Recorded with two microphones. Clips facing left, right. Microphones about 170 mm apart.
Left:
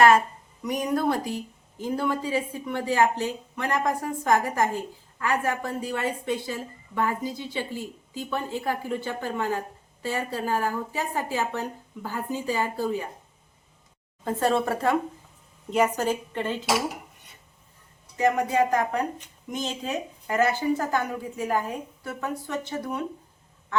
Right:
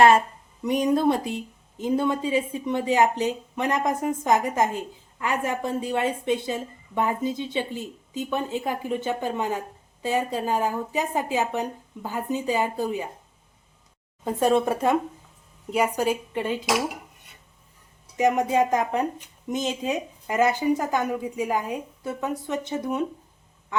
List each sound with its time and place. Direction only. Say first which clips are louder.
0.6 s a woman's voice: right 4 dB; 25° right (ahead or behind)
14.3 s speech: right 3 dB; 15° right (ahead or behind)
18.2 s a woman's voice: right 2 dB; 20° right (ahead or behind)